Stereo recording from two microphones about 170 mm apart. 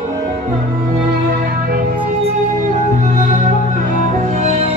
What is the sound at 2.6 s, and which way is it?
Music, 50° right (ahead or behind).